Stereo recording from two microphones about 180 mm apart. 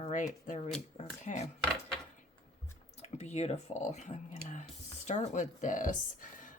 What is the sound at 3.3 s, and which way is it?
Speech, 40° left (ahead or behind).